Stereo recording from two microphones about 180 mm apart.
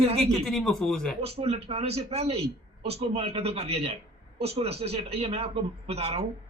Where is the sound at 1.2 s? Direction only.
35° right (ahead or behind).